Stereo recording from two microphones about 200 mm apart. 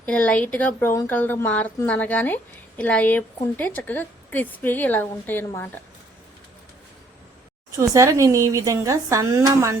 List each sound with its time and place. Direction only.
0.0 s speech: 5° left (ahead or behind)
7.8 s speech: 15° right (ahead or behind)